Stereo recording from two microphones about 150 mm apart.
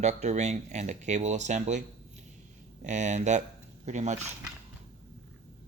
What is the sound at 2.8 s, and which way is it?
Speech, 55° right (ahead or behind).